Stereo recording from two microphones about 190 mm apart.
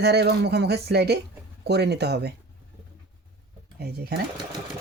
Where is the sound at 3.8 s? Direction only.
60° right (ahead or behind).